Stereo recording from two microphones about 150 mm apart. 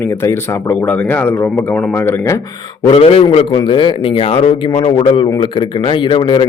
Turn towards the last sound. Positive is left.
turn(degrees=35)  # may be behind; listen again after turning